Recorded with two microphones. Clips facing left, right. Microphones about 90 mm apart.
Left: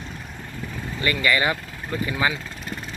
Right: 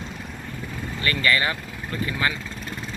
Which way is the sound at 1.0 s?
15° left (ahead or behind).